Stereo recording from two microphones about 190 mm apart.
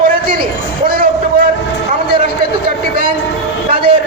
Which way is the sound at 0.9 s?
50° right (ahead or behind).